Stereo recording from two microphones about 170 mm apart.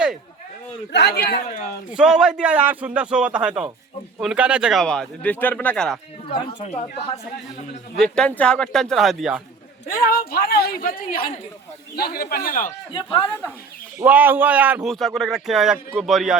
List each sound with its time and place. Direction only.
0.9 s a man's voice: 70° left (ahead or behind)
1.9 s a man's voice: 5° right (ahead or behind)
6.3 s speech: 30° left (ahead or behind)
7.9 s a man's voice: 5° left (ahead or behind)
9.9 s speech: 60° left (ahead or behind)
11.9 s speech: 65° left (ahead or behind)
12.9 s speech: 30° left (ahead or behind)
14.0 s a man's voice: 10° right (ahead or behind)